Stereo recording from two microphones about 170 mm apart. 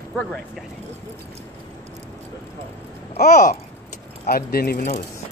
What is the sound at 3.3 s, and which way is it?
Babbling, 45° left (ahead or behind).